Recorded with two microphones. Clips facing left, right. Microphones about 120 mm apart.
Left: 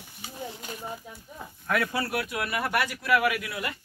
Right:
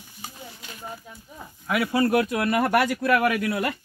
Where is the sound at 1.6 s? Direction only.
10° right (ahead or behind).